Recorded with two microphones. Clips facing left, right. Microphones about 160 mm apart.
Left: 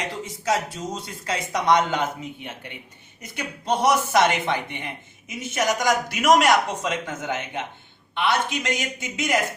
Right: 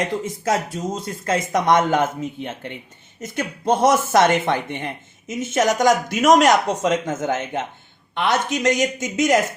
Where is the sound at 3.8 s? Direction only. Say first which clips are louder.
Right 3 dB; 50° right (ahead or behind).